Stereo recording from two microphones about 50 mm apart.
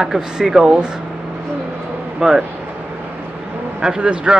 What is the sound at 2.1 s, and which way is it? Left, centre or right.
Speech, centre.